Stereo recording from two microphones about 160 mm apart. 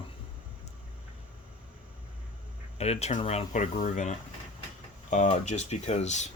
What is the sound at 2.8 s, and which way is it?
Speech, 40° left (ahead or behind).